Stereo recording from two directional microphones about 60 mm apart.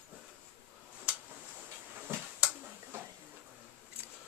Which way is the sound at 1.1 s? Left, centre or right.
Centre.